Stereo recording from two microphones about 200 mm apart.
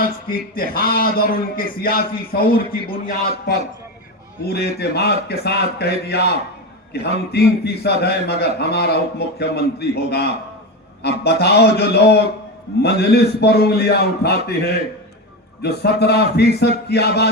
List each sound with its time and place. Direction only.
0.0 s a man's voice: 45° left (ahead or behind)
4.4 s a man's voice: 55° left (ahead or behind)